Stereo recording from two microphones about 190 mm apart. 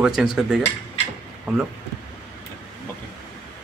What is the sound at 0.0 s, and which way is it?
Speech, 5° right (ahead or behind).